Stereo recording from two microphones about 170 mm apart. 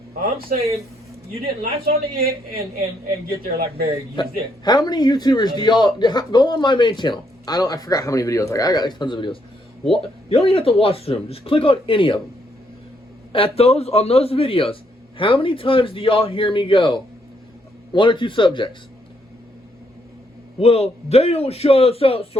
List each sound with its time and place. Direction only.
0.2 s a man's voice: 55° right (ahead or behind)
1.6 s a man's voice: 60° right (ahead or behind)
4.1 s a man's voice: 25° left (ahead or behind)
13.3 s a man's voice: 35° left (ahead or behind)
20.6 s speech: 35° left (ahead or behind)